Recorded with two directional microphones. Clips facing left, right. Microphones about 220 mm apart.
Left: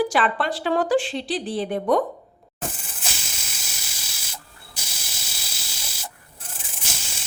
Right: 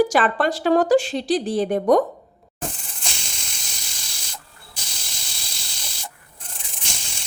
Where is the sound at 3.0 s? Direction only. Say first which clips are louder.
Even; 5° left (ahead or behind).